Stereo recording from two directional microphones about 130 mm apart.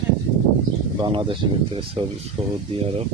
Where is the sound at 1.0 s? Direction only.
35° right (ahead or behind).